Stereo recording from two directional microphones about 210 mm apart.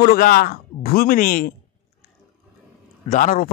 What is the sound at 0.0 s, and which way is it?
A man's voice, 45° left (ahead or behind).